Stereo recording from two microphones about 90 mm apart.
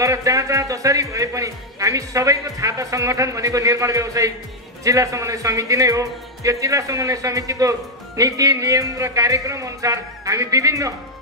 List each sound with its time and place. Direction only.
0.0 s a man's voice: 35° right (ahead or behind)